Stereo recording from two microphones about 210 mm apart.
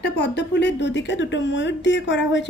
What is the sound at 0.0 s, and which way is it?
A woman's voice, 55° left (ahead or behind).